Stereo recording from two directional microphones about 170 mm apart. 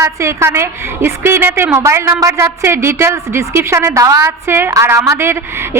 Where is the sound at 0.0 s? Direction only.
15° right (ahead or behind).